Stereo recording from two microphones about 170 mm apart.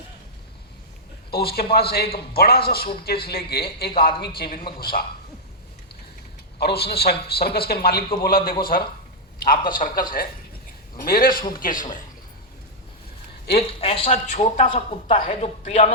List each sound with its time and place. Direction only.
1.3 s a man's voice: 65° left (ahead or behind)
6.6 s a man's voice: 70° left (ahead or behind); by 11.9 s 50° left (ahead or behind)
13.7 s speech: 35° left (ahead or behind)